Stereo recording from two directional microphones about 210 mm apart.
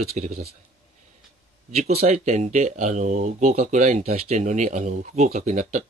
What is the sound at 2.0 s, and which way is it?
Speech, 35° right (ahead or behind).